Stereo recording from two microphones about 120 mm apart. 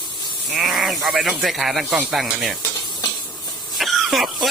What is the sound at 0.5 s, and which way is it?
Speech, centre (ahead or behind).